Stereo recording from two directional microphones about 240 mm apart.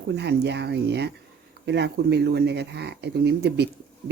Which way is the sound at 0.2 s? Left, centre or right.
Right.